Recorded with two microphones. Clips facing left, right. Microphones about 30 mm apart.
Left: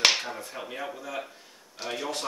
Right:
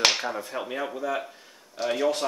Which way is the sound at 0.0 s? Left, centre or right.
Centre.